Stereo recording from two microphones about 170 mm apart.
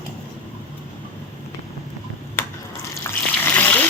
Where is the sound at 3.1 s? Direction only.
15° left (ahead or behind).